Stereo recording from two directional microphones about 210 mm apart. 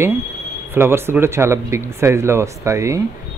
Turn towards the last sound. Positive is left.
turn(degrees=-15)  # may be behind; listen again after turning